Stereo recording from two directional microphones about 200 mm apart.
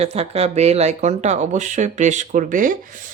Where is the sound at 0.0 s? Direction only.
30° right (ahead or behind).